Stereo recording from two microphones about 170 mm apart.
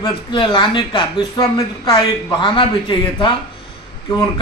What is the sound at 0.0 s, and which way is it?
Speech, 25° left (ahead or behind).